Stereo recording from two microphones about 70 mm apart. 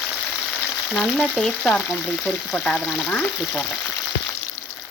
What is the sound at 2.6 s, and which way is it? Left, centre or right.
Speech, centre.